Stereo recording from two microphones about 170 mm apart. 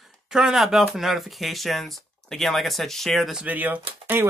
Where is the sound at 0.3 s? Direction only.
Centre (ahead or behind).